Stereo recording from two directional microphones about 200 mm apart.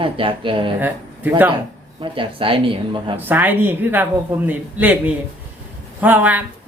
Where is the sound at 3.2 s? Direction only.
10° right (ahead or behind).